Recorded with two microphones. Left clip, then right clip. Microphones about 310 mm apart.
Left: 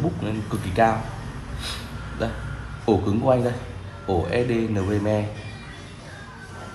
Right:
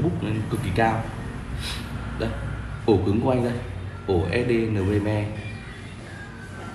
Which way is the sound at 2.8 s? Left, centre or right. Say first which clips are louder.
Left 1 dB; left.